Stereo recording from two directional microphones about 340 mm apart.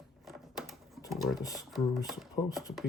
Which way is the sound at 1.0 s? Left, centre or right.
Centre.